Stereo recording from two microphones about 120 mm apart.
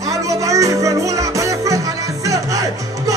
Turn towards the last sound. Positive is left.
turn(degrees=-30)  # may be behind; listen again after turning